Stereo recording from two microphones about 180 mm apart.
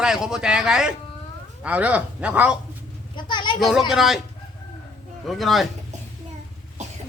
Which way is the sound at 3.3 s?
25° left (ahead or behind).